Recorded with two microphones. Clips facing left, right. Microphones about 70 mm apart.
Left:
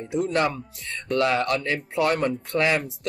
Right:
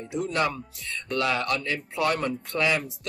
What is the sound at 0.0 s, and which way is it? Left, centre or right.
Speech, left.